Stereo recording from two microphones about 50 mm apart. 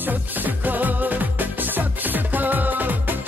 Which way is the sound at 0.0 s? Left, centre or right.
Right.